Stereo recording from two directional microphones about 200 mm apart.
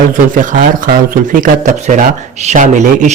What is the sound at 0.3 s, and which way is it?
Speech, 40° right (ahead or behind).